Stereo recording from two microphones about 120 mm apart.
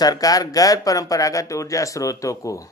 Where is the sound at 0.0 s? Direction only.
30° left (ahead or behind).